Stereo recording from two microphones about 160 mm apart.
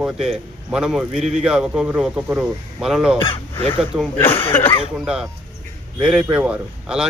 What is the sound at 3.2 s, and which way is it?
Speech, 35° left (ahead or behind).